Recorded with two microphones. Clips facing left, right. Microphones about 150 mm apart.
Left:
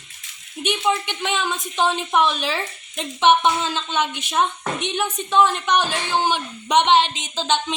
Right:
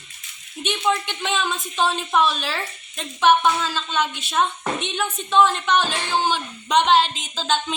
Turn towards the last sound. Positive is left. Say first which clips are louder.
# left 1 dB
turn(degrees=20)  # may be behind; listen again after turning